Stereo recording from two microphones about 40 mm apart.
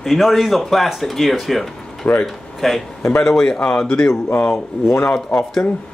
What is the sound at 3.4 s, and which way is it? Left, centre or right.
Speech, left.